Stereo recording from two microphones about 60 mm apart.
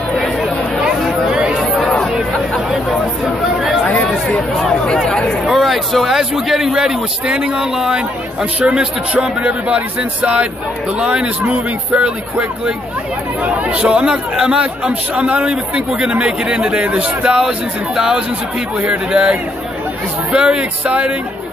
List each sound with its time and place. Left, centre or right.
1.5 s chatter: centre
3.8 s chatter: centre
4.6 s speech: centre
5.5 s speech: centre
8.5 s a man's voice: right